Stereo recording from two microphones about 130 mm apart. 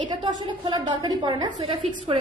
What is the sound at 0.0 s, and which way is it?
A woman's voice, 40° right (ahead or behind).